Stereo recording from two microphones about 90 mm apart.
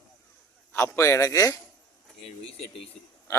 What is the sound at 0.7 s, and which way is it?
Speech, 30° left (ahead or behind).